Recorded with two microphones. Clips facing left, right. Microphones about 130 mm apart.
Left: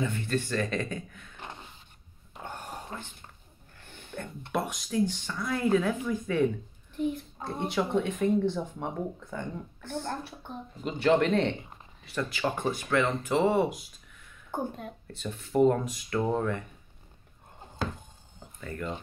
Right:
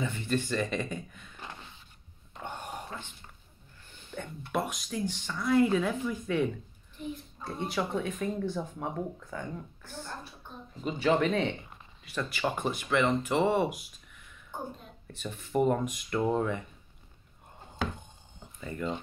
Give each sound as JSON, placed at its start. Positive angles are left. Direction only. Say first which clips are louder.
{"t": 0.0, "sound": "speech", "louder": "left 1 dB", "side_deg": -10}
{"t": 2.3, "sound": "a sound", "louder": "right 1 dB", "side_deg": 5}
{"t": 2.9, "sound": "speech", "louder": "left 2 dB", "side_deg": 30}
{"t": 4.1, "sound": "speech", "louder": "left 1 dB", "side_deg": -5}
{"t": 7.4, "sound": "speech", "louder": "left 3 dB", "side_deg": 65}
{"t": 7.7, "sound": "speech", "louder": "left 4 dB", "side_deg": -5}
{"t": 9.8, "sound": "speech", "louder": "left 10 dB", "side_deg": 65}
{"t": 11.0, "sound": "speech", "louder": "left 3 dB", "side_deg": -5}
{"t": 14.5, "sound": "a woman's voice", "louder": "left 6 dB", "side_deg": 65}
{"t": 15.0, "sound": "speech", "louder": "left 2 dB", "side_deg": 0}
{"t": 18.6, "sound": "speech", "louder": "right 1 dB", "side_deg": -10}